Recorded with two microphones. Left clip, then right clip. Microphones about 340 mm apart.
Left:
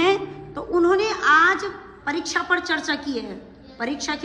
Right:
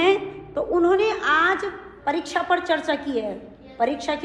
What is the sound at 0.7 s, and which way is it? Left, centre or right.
A woman's voice, centre.